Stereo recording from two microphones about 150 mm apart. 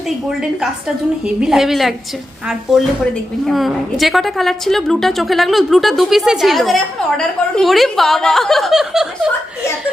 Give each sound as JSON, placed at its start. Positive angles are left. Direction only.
{"t": 1.4, "sound": "a woman's voice", "side_deg": -5}